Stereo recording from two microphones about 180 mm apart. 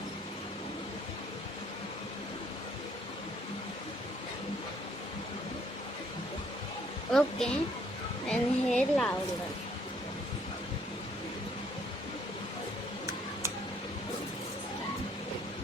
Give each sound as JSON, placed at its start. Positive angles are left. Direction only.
{"t": 7.1, "sound": "a woman's voice", "side_deg": 5}